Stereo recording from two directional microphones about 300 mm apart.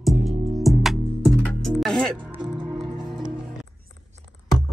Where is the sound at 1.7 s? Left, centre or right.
Centre.